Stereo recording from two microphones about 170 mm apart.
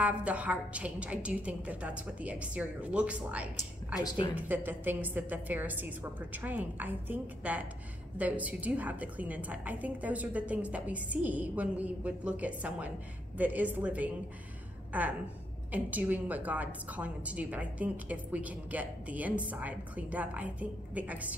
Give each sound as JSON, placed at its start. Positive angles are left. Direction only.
{"t": 0.0, "sound": "a woman's voice", "side_deg": -10}
{"t": 4.0, "sound": "speech", "side_deg": 25}
{"t": 4.4, "sound": "a woman's voice", "side_deg": -10}